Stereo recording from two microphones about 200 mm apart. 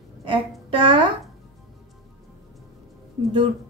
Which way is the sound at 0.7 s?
25° right (ahead or behind).